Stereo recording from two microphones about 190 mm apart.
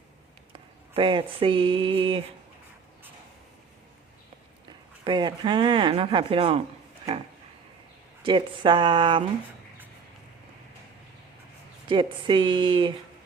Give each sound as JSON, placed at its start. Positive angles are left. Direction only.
{"t": 0.5, "sound": "a sound", "side_deg": -30}
{"t": 5.0, "sound": "speech", "side_deg": -25}
{"t": 8.2, "sound": "speech", "side_deg": -25}
{"t": 11.9, "sound": "speech", "side_deg": -25}